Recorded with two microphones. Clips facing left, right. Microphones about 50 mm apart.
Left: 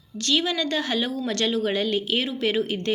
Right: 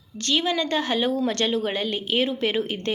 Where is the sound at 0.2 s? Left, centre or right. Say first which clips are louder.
Even; right.